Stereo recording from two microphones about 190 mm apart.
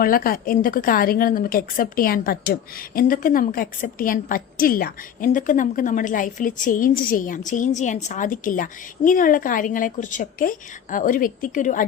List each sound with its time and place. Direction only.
0.0 s a woman's voice: 50° left (ahead or behind)